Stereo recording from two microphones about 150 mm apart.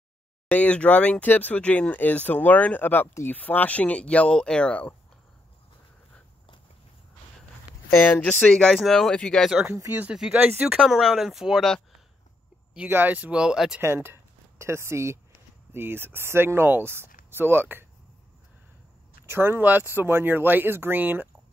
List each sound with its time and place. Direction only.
0.5 s speech: 10° left (ahead or behind)
7.9 s speech: 15° left (ahead or behind)
9.7 s speech: 20° right (ahead or behind)
10.0 s speech: 5° right (ahead or behind)
12.7 s speech: 10° right (ahead or behind)
19.2 s speech: 15° right (ahead or behind)